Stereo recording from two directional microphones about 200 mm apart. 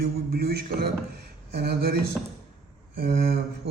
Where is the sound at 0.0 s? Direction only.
50° right (ahead or behind).